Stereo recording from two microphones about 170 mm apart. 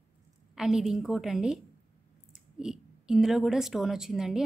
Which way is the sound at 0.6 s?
5° right (ahead or behind).